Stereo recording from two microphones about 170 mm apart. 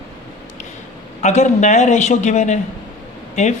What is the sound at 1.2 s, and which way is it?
Speech, 45° left (ahead or behind).